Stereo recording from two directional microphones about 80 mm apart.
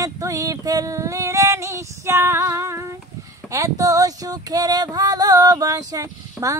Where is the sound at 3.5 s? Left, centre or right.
Right.